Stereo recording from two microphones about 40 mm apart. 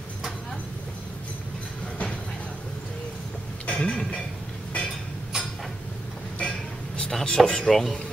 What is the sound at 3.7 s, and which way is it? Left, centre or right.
Cutlery, left.